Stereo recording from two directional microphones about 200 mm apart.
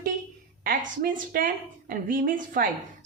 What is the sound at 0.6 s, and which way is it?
A woman's voice, 45° right (ahead or behind).